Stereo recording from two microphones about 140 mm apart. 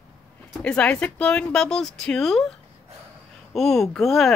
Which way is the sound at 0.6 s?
5° left (ahead or behind).